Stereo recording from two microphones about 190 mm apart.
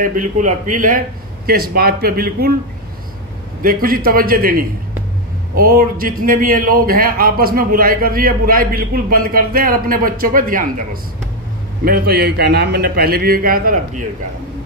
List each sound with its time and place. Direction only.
0.0 s a man's voice: 45° right (ahead or behind)
3.6 s a man's voice: 50° right (ahead or behind)